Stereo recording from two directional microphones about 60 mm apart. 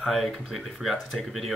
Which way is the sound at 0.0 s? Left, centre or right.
Centre.